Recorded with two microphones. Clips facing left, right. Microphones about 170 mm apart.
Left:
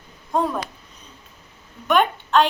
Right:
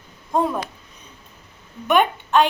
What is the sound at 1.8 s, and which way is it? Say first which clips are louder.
Speech: right 1 dB; 5° right (ahead or behind).